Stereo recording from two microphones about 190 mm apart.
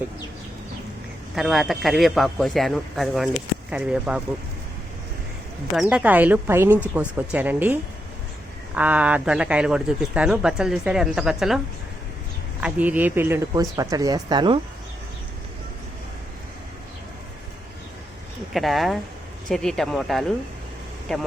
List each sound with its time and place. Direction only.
1.4 s speech: centre (ahead or behind)
5.9 s speech: 5° right (ahead or behind); by 14.6 s 25° right (ahead or behind)
18.5 s speech: centre (ahead or behind)